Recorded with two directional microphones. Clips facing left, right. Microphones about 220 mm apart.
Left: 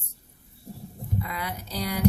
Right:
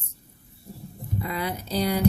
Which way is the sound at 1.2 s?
30° right (ahead or behind).